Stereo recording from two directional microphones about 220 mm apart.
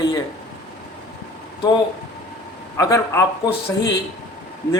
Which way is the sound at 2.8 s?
15° left (ahead or behind).